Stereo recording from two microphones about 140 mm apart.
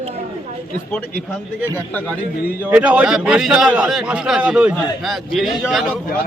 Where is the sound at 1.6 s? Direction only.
15° left (ahead or behind).